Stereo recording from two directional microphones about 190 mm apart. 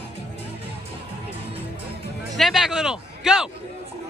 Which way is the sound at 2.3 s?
Centre (ahead or behind).